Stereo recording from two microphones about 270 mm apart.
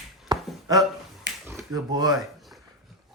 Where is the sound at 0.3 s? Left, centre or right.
Centre.